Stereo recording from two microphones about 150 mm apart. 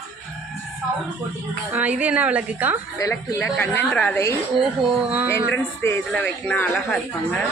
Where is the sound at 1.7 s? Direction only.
10° right (ahead or behind).